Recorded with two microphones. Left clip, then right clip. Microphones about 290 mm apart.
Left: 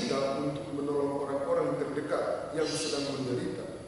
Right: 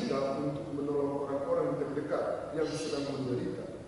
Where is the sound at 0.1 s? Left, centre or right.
Centre.